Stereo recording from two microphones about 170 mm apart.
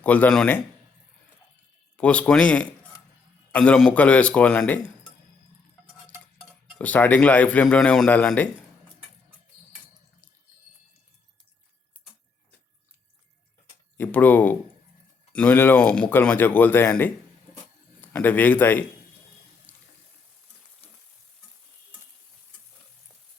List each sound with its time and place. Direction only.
0.0 s speech: 10° left (ahead or behind)
2.0 s speech: 5° left (ahead or behind)
6.7 s speech: 10° left (ahead or behind)
13.9 s speech: 10° left (ahead or behind)
19.7 s water: 10° left (ahead or behind)